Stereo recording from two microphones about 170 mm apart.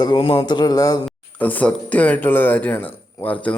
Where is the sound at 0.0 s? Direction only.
30° left (ahead or behind).